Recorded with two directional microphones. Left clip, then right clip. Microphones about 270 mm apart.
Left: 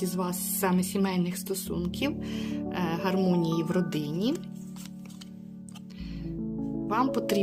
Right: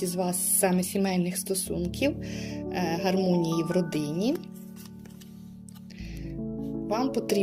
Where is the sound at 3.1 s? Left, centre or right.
Centre.